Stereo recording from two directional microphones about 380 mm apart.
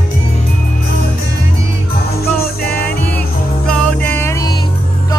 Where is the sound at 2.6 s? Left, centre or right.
Left.